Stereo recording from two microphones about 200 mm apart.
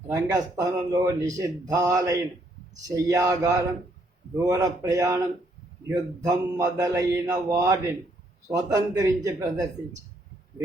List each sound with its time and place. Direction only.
0.1 s speech: 15° right (ahead or behind)